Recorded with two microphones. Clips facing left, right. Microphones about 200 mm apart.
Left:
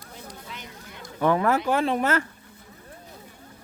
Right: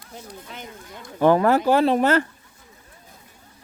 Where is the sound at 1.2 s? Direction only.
30° right (ahead or behind).